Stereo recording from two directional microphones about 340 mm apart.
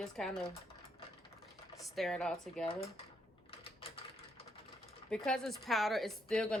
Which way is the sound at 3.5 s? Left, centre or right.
Centre.